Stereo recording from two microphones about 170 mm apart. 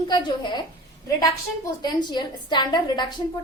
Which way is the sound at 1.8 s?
25° left (ahead or behind).